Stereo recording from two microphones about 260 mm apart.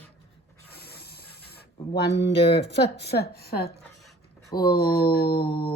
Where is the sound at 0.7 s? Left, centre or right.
Left.